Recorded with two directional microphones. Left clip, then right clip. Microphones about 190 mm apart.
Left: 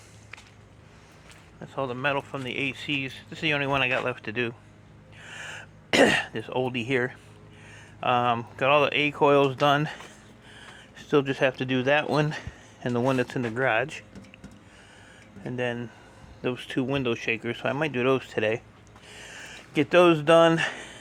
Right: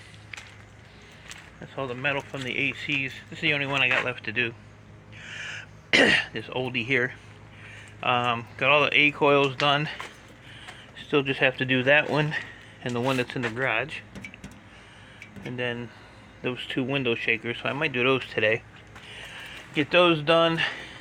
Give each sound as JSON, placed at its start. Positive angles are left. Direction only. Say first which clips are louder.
{"t": 1.7, "sound": "speech", "louder": "left 1 dB", "side_deg": 30}
{"t": 5.5, "sound": "throat clearing", "louder": "right 3 dB", "side_deg": 30}
{"t": 7.7, "sound": "speech", "louder": "even", "side_deg": 25}
{"t": 15.4, "sound": "speech", "louder": "left 1 dB", "side_deg": 35}
{"t": 19.0, "sound": "a sound", "louder": "right 2 dB", "side_deg": 40}